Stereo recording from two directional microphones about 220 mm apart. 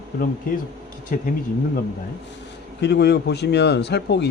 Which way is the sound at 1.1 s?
40° left (ahead or behind).